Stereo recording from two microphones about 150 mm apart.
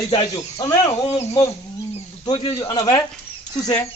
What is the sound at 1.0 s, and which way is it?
Speech, 45° left (ahead or behind).